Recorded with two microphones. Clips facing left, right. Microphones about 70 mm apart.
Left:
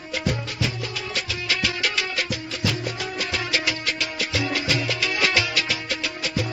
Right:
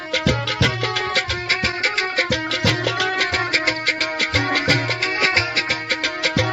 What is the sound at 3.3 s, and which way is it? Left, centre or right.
Music, right.